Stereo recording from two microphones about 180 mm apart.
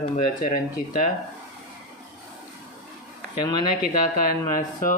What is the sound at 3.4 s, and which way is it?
Speech, 25° left (ahead or behind).